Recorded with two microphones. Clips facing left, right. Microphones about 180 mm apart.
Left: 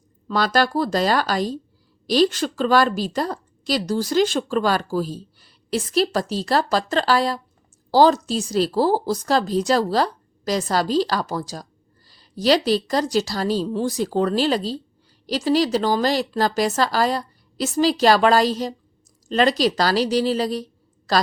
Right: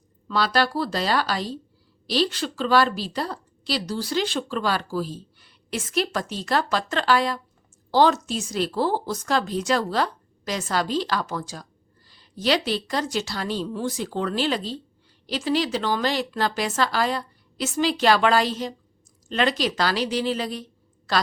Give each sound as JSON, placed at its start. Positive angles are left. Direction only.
{"t": 0.3, "sound": "a woman's voice", "side_deg": 45}